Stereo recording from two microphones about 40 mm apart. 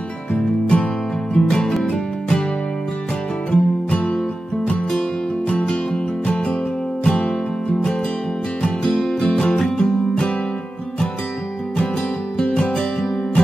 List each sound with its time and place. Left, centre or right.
0.3 s music: left
1.3 s music: centre
3.5 s music: left
5.5 s music: left
7.1 s music: left
8.8 s music: centre
9.2 s music: left